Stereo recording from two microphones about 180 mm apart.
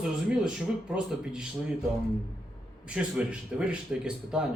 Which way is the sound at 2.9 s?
5° right (ahead or behind).